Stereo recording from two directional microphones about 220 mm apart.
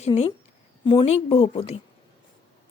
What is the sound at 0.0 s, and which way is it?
Speech, 25° left (ahead or behind).